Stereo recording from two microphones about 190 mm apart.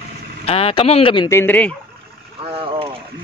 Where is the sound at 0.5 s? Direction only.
30° left (ahead or behind).